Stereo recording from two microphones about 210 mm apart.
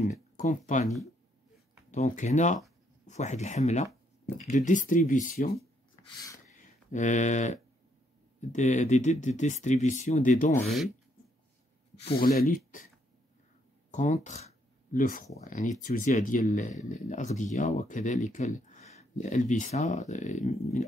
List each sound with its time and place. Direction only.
0.0 s speech: 35° left (ahead or behind)
1.9 s speech: 35° left (ahead or behind)
6.6 s speech: 35° left (ahead or behind)
12.2 s speech: 45° left (ahead or behind)
13.9 s speech: 35° left (ahead or behind)